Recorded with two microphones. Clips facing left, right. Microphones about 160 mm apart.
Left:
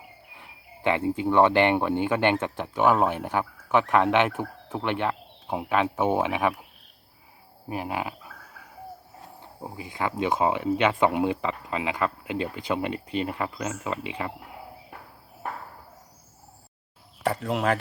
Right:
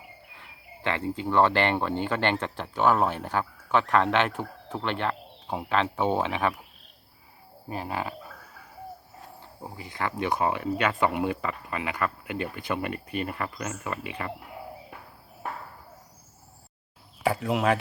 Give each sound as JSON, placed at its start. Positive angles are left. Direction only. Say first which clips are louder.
{"t": 0.3, "sound": "speech", "louder": "even", "side_deg": 15}
{"t": 7.7, "sound": "speech", "louder": "left 2 dB", "side_deg": 15}
{"t": 9.6, "sound": "speech", "louder": "left 2 dB", "side_deg": 15}
{"t": 17.2, "sound": "speech", "louder": "right 1 dB", "side_deg": 0}